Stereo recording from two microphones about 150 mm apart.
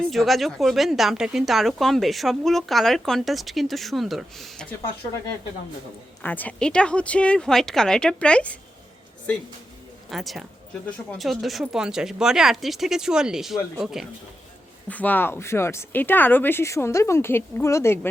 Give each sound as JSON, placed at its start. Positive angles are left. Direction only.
{"t": 0.1, "sound": "a woman's voice", "side_deg": 0}
{"t": 6.2, "sound": "speech", "side_deg": 10}
{"t": 10.1, "sound": "a woman's voice", "side_deg": 0}
{"t": 14.8, "sound": "speech", "side_deg": 10}